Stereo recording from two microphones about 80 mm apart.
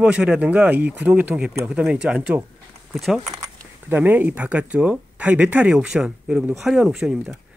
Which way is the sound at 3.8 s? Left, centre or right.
Right.